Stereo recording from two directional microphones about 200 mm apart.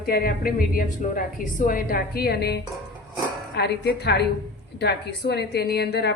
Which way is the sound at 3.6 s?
55° left (ahead or behind).